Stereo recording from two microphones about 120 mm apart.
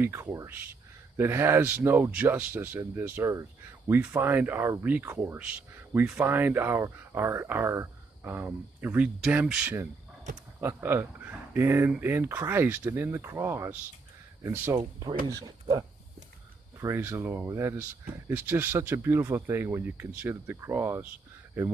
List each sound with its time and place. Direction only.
0.0 s speech: 20° right (ahead or behind)
16.8 s speech: 20° right (ahead or behind)